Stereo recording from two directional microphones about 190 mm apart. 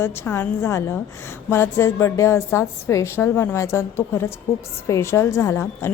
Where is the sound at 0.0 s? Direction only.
10° left (ahead or behind).